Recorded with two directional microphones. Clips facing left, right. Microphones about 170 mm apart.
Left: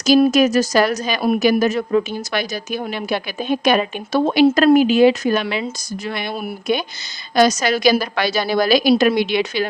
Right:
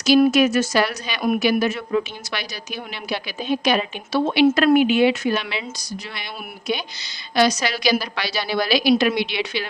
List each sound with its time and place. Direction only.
0.3 s a woman's voice: 40° left (ahead or behind)
4.2 s a woman's voice: 35° left (ahead or behind)